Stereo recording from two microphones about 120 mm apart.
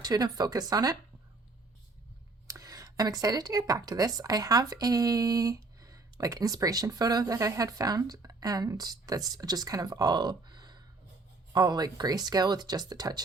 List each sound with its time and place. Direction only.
0.0 s speech: 35° right (ahead or behind)
2.5 s speech: 30° right (ahead or behind)